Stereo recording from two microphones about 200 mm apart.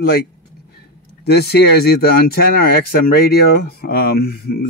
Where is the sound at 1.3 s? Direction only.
55° left (ahead or behind).